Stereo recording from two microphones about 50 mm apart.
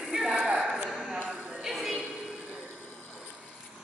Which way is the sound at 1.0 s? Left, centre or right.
Right.